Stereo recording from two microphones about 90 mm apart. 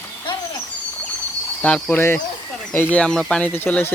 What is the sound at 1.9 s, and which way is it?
Speech, 25° left (ahead or behind).